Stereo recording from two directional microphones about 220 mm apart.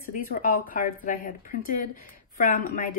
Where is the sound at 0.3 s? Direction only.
40° left (ahead or behind).